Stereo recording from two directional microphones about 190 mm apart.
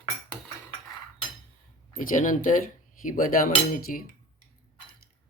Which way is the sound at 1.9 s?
45° left (ahead or behind).